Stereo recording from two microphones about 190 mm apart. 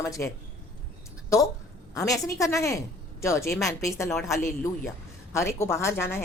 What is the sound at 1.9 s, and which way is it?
A woman's voice, 15° left (ahead or behind).